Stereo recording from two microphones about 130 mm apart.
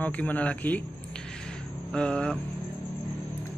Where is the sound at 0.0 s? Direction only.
10° left (ahead or behind).